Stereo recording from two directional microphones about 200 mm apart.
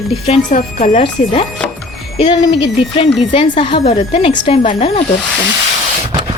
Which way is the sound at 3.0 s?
25° left (ahead or behind).